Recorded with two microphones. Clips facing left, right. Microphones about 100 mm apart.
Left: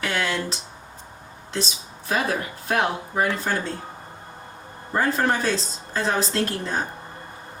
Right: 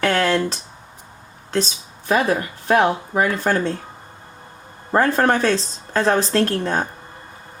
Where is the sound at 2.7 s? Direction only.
60° right (ahead or behind).